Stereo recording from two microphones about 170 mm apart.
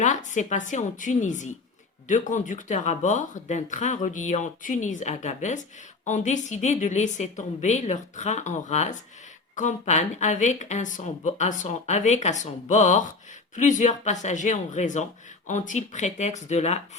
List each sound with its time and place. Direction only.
0.0 s speech: 45° left (ahead or behind)